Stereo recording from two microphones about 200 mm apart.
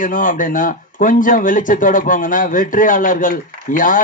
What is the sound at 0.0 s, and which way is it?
A man's voice, 40° left (ahead or behind).